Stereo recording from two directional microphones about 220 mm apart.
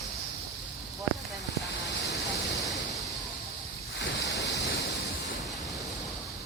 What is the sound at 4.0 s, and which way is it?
Ocean, 55° left (ahead or behind).